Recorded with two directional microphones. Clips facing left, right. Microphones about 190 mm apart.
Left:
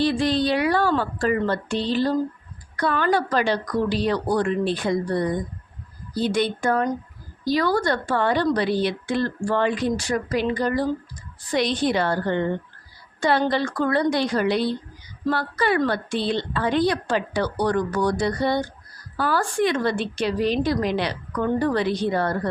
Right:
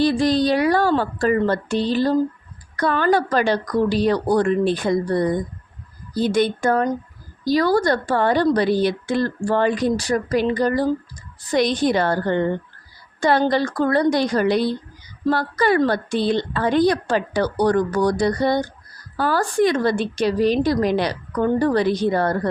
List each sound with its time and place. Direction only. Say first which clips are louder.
0.0 s a woman's voice: right 3 dB; 40° right (ahead or behind)